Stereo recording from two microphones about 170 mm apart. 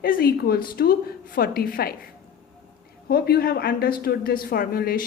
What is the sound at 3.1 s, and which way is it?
A woman's voice, 65° left (ahead or behind).